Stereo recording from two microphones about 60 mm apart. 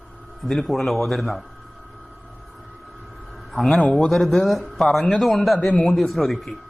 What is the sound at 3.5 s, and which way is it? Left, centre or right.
Speech, centre.